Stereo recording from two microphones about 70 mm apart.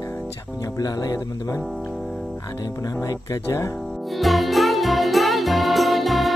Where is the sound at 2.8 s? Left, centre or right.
Left.